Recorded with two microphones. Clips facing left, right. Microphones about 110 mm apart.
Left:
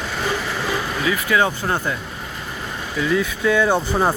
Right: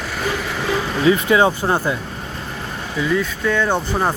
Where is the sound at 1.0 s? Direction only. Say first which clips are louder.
Right 6 dB; 25° right (ahead or behind).